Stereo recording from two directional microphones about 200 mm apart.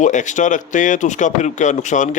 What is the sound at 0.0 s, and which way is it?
Speech, 40° left (ahead or behind).